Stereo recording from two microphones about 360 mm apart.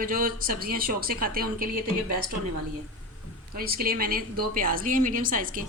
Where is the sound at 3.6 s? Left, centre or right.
Right.